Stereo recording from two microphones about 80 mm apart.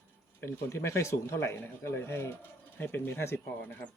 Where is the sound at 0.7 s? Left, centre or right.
Left.